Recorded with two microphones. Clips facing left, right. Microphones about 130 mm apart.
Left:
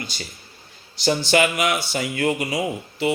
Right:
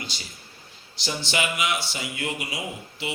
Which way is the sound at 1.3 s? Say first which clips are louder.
Left 6 dB; 50° left (ahead or behind).